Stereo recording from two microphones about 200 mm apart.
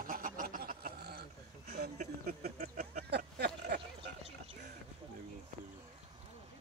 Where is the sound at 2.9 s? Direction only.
50° right (ahead or behind).